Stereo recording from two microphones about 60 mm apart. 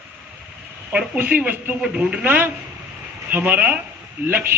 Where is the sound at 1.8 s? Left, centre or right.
Centre.